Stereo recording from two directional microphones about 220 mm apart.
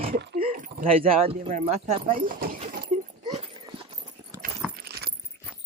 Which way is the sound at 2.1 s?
40° right (ahead or behind).